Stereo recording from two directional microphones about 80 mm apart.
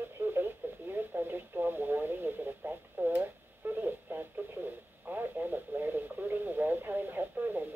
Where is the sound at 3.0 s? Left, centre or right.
Right.